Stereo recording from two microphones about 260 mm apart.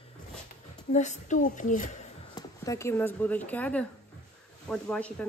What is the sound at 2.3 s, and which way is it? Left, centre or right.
A woman's voice, centre.